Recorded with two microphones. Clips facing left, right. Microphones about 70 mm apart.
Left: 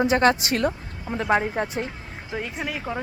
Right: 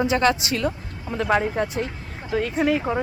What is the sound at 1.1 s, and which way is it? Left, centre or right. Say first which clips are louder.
Speech: right 1 dB; left.